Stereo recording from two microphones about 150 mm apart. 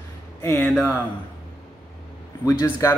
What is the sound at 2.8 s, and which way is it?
Speech, 20° left (ahead or behind).